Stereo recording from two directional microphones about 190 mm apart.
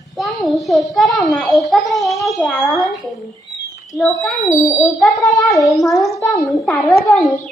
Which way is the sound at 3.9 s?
Centre (ahead or behind).